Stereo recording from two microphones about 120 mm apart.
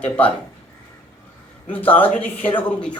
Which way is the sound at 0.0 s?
10° left (ahead or behind).